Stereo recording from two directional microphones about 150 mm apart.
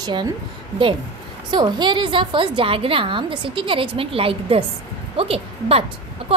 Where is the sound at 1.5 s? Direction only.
30° right (ahead or behind).